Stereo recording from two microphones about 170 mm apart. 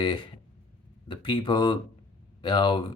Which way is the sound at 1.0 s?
30° left (ahead or behind).